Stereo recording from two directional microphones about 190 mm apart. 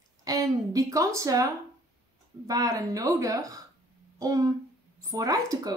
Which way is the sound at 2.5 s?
20° right (ahead or behind).